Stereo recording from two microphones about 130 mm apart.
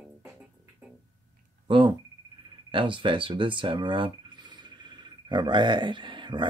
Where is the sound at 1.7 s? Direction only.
40° right (ahead or behind).